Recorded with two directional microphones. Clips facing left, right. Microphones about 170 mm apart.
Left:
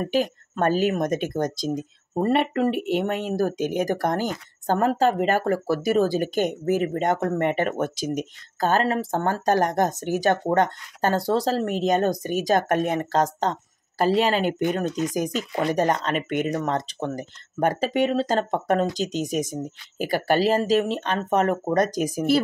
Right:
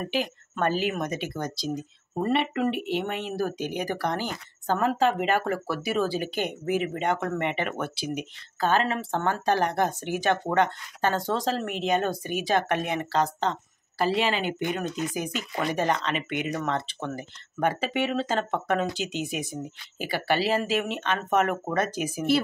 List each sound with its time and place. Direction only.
0.0 s speech: 45° left (ahead or behind)